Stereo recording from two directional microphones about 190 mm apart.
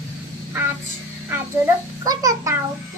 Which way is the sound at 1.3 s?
15° right (ahead or behind).